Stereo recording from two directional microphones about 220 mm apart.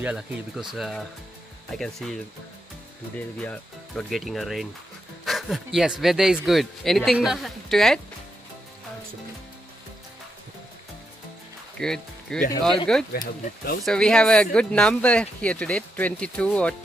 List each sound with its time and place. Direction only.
0.0 s speech: 5° right (ahead or behind)
3.2 s speech: 5° left (ahead or behind)
11.8 s speech: 5° left (ahead or behind)
13.1 s speech: 40° left (ahead or behind)
13.8 s speech: 5° left (ahead or behind)